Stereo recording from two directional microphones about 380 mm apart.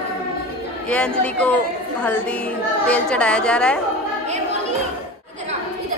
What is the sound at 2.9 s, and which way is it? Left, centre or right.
Speech, centre.